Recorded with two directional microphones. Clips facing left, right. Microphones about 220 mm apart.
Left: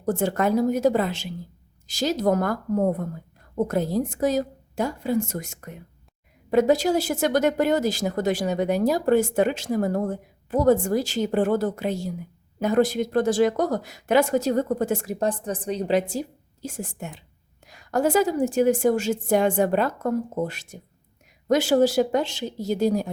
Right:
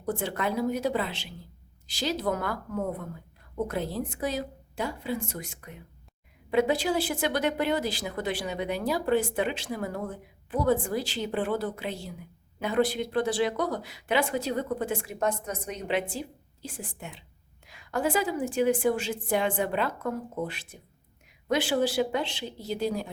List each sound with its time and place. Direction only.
0.0 s speech: 45° left (ahead or behind)